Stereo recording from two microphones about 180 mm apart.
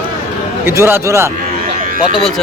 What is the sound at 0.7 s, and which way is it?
Speech, 15° right (ahead or behind).